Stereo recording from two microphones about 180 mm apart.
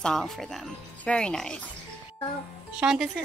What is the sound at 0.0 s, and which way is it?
Speech, centre (ahead or behind).